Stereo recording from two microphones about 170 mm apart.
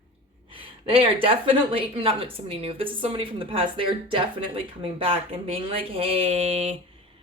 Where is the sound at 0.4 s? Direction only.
30° right (ahead or behind).